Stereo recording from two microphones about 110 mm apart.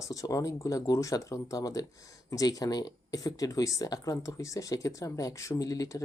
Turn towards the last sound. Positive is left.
turn(degrees=30)  # may be behind; listen again after turning